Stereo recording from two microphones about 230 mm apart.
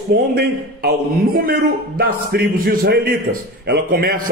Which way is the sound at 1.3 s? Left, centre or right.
Right.